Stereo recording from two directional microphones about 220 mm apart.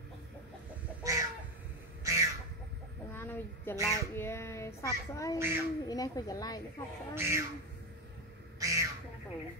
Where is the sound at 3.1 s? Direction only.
10° left (ahead or behind).